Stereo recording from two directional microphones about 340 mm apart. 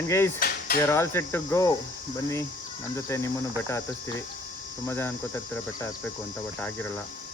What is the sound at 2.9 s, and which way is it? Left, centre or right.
Cricket, centre.